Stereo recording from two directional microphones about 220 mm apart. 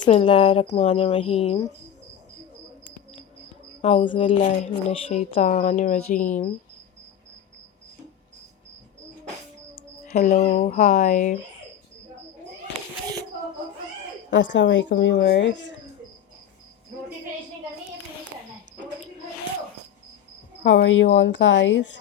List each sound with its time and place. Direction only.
0.1 s a woman's voice: 25° left (ahead or behind)
3.8 s a woman's voice: 25° left (ahead or behind)
10.1 s speech: 35° left (ahead or behind)
14.3 s speech: 55° left (ahead or behind)
20.8 s speech: 60° left (ahead or behind)